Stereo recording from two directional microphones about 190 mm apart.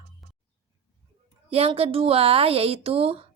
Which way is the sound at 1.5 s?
30° right (ahead or behind).